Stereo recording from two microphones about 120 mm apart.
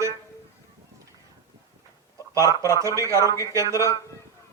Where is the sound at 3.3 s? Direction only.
30° left (ahead or behind).